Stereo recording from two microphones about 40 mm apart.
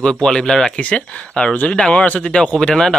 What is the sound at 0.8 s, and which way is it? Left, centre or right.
Speech, left.